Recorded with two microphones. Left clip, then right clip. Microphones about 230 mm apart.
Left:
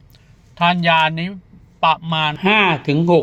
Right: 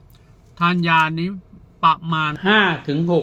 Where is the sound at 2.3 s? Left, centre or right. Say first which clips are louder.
Left 1 dB; left.